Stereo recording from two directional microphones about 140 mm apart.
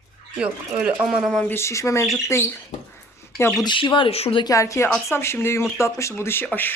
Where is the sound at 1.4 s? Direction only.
20° left (ahead or behind).